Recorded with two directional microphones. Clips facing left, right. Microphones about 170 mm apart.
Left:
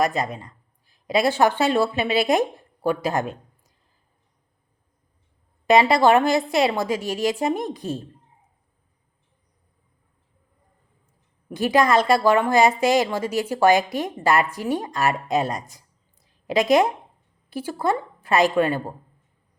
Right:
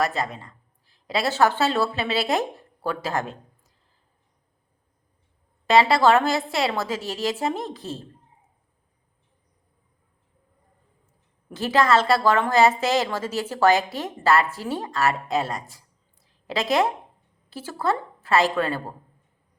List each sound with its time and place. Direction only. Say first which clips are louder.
0.0 s speech: left 3 dB; 15° left (ahead or behind)
5.6 s a woman's voice: left 1 dB; 15° left (ahead or behind)
11.4 s a woman's voice: left 2 dB; 15° left (ahead or behind)